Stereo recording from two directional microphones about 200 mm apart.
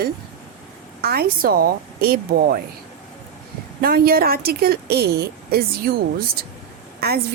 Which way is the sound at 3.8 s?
50° right (ahead or behind).